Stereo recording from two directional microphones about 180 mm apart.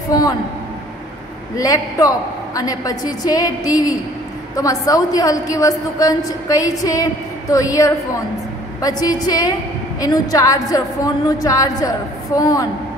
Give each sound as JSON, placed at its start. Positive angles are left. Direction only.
{"t": 0.1, "sound": "a woman's voice", "side_deg": 20}
{"t": 1.6, "sound": "a woman's voice", "side_deg": 20}